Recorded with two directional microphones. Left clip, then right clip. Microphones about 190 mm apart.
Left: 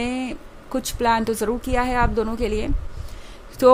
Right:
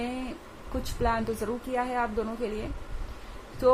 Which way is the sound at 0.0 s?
50° left (ahead or behind).